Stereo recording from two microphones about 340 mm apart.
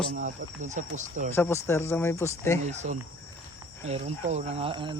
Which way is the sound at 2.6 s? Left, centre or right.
Centre.